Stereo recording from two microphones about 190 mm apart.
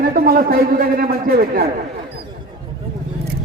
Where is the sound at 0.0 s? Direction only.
50° right (ahead or behind).